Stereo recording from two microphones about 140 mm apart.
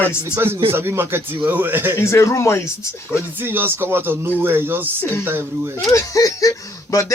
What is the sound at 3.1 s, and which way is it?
Speech, 15° right (ahead or behind).